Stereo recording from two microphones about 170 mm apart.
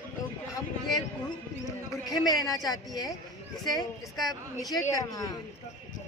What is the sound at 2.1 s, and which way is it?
A woman's voice, 20° left (ahead or behind).